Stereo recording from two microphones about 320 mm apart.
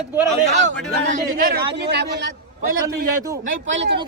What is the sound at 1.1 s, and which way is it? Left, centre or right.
Speech, right.